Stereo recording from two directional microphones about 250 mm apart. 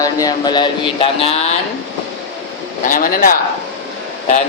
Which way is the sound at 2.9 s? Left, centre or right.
Left.